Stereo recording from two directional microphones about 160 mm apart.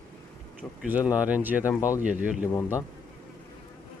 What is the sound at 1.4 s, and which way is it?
Speech, 10° right (ahead or behind).